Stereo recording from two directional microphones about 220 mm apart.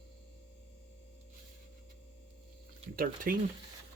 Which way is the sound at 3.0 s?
40° right (ahead or behind).